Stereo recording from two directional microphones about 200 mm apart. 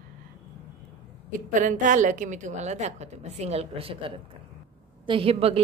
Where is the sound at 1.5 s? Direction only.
40° right (ahead or behind).